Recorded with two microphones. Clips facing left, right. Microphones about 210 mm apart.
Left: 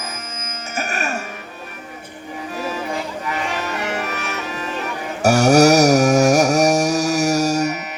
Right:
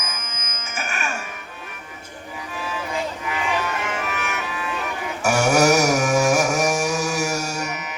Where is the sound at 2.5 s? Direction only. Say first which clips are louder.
Left 3 dB; 40° left (ahead or behind).